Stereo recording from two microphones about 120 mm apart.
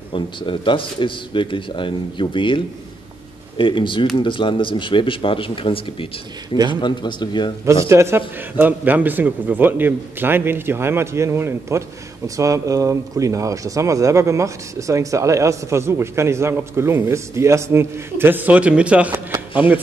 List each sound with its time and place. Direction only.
0.1 s a man's voice: 45° left (ahead or behind)
7.6 s speech: 25° right (ahead or behind)
19.1 s shuffling cards: 20° right (ahead or behind)